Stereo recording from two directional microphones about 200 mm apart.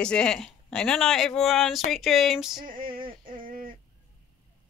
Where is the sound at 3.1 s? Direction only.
45° right (ahead or behind).